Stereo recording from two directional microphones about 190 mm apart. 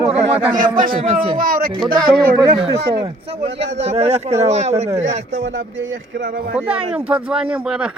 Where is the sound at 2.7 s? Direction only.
60° right (ahead or behind).